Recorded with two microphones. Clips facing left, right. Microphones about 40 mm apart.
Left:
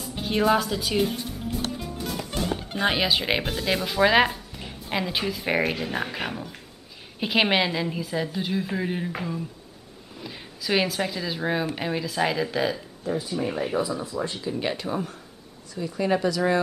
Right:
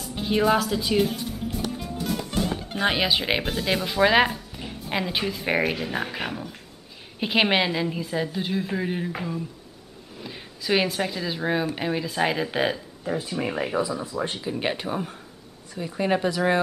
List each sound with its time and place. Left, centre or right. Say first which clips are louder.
0.0 s speech: right 1 dB; centre
1.8 s music: right 2 dB; centre
2.7 s speech: even; centre; by 13.5 s right
13.7 s speech: right 1 dB; centre
14.3 s speech: right 1 dB; right